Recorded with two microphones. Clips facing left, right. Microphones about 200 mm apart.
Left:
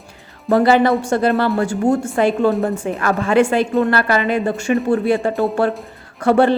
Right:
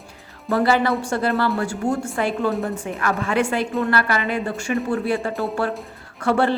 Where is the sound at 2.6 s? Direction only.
40° left (ahead or behind).